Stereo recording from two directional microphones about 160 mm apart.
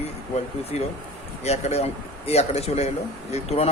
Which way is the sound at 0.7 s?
45° left (ahead or behind).